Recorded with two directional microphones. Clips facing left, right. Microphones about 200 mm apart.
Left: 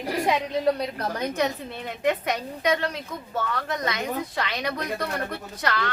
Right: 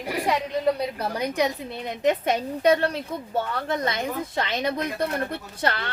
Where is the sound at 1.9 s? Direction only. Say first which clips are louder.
Right 3 dB; 25° right (ahead or behind).